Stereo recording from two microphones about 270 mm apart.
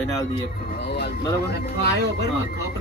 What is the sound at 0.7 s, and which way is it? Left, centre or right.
Speech, left.